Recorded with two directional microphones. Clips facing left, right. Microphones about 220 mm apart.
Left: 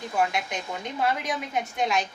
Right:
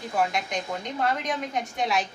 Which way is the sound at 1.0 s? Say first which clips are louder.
Even; 5° left (ahead or behind).